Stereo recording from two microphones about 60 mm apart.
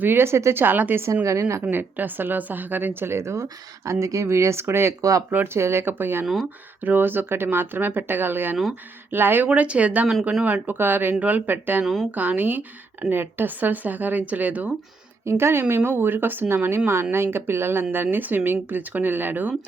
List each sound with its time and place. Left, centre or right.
0.0 s speech: right
1.1 s a woman's voice: right
1.7 s speech: right
6.2 s speech: centre
6.8 s speech: right
9.6 s a woman's voice: right
11.8 s speech: centre
12.1 s a woman's voice: right
15.3 s speech: right